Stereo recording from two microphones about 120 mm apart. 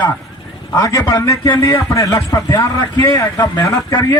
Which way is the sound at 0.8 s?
30° left (ahead or behind).